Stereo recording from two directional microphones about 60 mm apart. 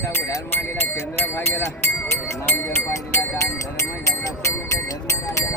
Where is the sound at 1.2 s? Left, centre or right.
Left.